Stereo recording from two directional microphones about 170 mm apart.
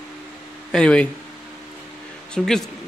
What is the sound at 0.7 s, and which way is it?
Speech, 5° left (ahead or behind).